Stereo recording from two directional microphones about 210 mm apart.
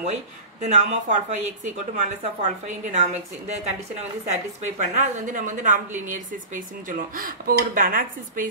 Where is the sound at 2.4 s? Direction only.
35° right (ahead or behind).